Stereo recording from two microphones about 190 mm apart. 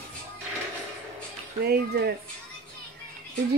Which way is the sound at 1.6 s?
55° right (ahead or behind).